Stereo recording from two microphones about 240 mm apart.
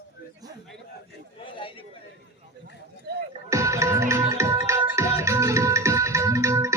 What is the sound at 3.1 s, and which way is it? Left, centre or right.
Music, right.